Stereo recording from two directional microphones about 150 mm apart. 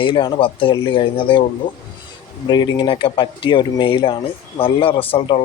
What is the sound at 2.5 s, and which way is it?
Speech, 30° left (ahead or behind).